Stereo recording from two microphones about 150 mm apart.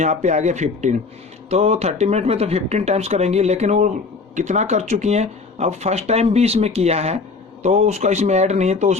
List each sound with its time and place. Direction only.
0.0 s speech: 50° right (ahead or behind)